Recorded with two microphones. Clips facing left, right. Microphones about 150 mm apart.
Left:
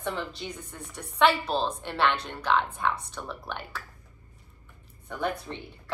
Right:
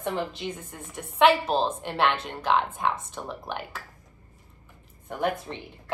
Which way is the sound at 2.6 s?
45° right (ahead or behind).